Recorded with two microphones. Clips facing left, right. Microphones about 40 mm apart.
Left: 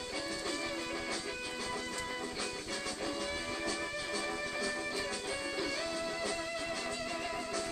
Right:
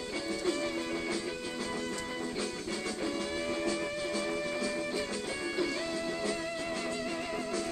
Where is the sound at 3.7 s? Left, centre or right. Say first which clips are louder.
Right 4 dB; centre.